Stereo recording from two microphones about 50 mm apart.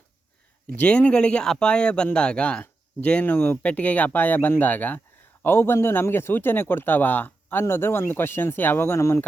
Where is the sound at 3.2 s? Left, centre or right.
Left.